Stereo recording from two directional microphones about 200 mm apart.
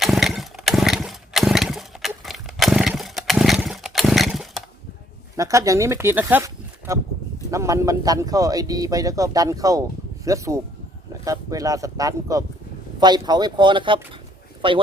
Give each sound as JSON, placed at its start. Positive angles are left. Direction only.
{"t": 0.0, "sound": "chainsaw", "side_deg": 0}
{"t": 5.4, "sound": "speech", "side_deg": -15}